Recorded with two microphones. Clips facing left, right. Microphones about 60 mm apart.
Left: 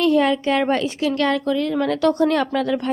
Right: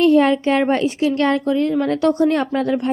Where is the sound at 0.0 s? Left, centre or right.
Right.